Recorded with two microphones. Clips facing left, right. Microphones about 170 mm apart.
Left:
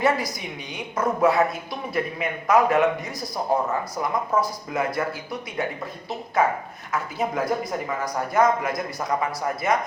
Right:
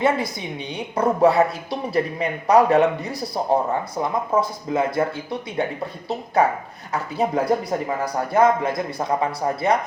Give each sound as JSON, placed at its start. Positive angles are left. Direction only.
{"t": 0.0, "sound": "a woman's voice", "side_deg": -25}
{"t": 6.9, "sound": "a woman's voice", "side_deg": -30}